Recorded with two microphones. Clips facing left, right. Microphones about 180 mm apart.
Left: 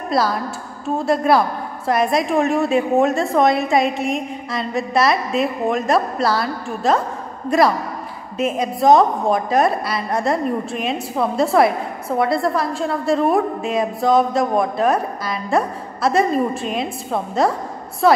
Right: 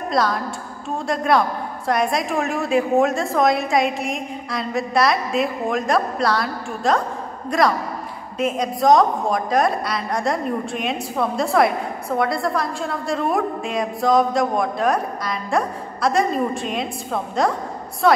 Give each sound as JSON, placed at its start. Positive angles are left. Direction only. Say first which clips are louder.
{"t": 0.1, "sound": "a woman's voice", "louder": "left 2 dB", "side_deg": 5}